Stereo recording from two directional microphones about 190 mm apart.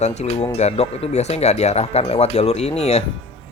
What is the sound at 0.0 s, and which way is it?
Speech, 35° left (ahead or behind).